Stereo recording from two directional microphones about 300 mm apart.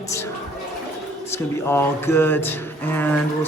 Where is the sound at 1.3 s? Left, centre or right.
Centre.